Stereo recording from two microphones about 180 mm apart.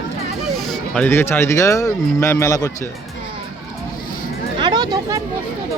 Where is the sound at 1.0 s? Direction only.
10° left (ahead or behind).